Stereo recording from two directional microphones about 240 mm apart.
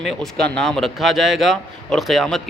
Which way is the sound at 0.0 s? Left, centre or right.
Centre.